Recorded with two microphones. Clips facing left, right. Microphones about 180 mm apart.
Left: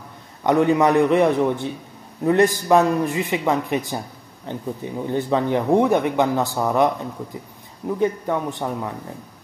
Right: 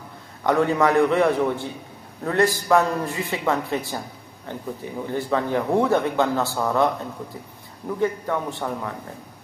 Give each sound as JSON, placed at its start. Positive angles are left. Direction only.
{"t": 0.4, "sound": "a man's voice", "side_deg": 20}
{"t": 8.0, "sound": "speech", "side_deg": 15}